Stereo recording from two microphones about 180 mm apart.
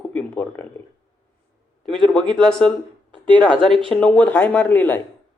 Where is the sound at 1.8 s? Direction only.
5° left (ahead or behind).